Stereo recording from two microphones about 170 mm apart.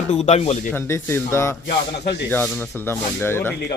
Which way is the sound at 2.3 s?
10° left (ahead or behind).